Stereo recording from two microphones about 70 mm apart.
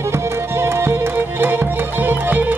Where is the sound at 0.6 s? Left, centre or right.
Right.